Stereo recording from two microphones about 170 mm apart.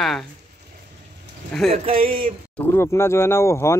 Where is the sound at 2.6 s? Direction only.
15° left (ahead or behind).